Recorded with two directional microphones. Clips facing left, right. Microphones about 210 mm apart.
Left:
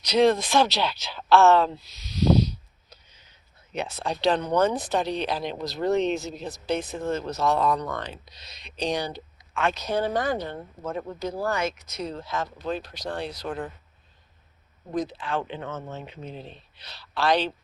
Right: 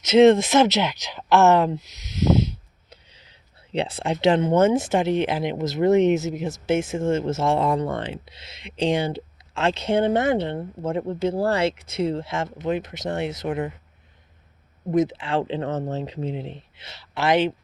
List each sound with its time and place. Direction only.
0.0 s speech: 25° right (ahead or behind)
3.7 s speech: 30° right (ahead or behind)
14.8 s speech: 25° right (ahead or behind)
16.3 s speech: 20° right (ahead or behind)